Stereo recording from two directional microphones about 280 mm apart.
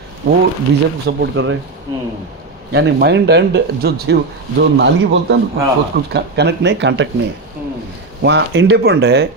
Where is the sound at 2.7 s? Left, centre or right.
Right.